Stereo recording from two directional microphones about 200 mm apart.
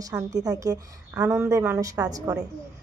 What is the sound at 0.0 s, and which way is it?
Speech, 20° right (ahead or behind).